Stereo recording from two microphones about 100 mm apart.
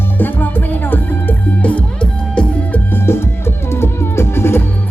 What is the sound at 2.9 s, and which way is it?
Music, 25° left (ahead or behind).